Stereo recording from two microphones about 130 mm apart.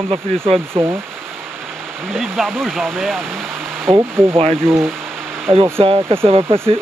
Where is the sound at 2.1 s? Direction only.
Centre (ahead or behind).